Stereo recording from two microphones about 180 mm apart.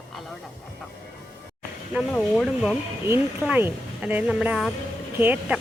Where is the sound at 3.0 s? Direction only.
10° right (ahead or behind).